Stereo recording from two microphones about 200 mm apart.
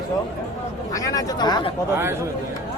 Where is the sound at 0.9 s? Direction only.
15° left (ahead or behind).